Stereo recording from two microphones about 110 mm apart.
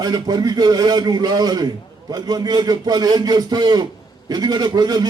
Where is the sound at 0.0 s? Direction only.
35° right (ahead or behind).